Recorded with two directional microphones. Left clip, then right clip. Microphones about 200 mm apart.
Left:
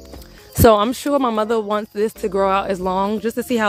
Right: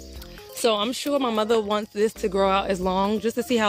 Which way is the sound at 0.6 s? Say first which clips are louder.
Left 9 dB; 25° left (ahead or behind).